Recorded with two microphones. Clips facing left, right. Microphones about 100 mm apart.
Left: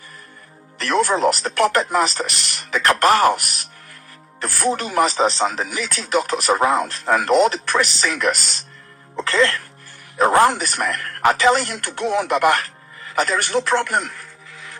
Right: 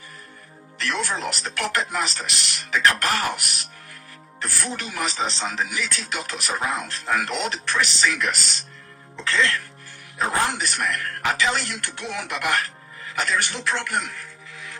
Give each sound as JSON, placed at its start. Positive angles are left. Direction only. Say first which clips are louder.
{"t": 0.8, "sound": "a man's voice", "louder": "left 9 dB", "side_deg": 50}
{"t": 10.2, "sound": "a man's voice", "louder": "left 9 dB", "side_deg": 55}